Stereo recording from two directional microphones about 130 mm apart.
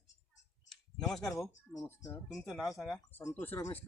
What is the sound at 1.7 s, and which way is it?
Speech, 25° left (ahead or behind).